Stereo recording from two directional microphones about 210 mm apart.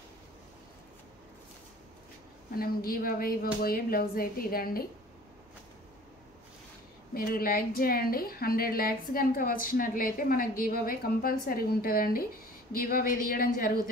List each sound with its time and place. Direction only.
2.5 s a woman's voice: 45° left (ahead or behind)
7.2 s a woman's voice: 45° left (ahead or behind)